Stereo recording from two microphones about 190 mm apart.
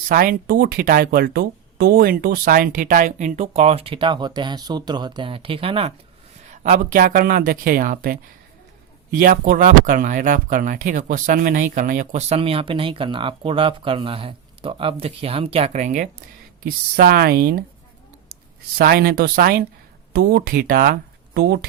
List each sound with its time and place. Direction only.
0.1 s speech: 50° right (ahead or behind); by 5.9 s 30° right (ahead or behind)
6.5 s speech: 40° right (ahead or behind)
16.6 s speech: 50° right (ahead or behind)
18.8 s speech: 50° right (ahead or behind)